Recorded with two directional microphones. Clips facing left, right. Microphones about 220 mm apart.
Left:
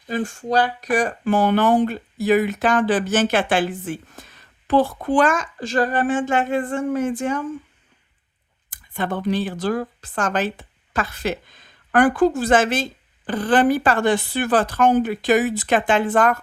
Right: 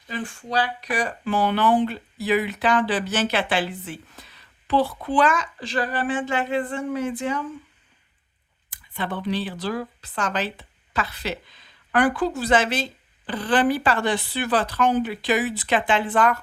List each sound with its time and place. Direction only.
0.1 s a woman's voice: 45° left (ahead or behind)
8.7 s a woman's voice: 45° left (ahead or behind)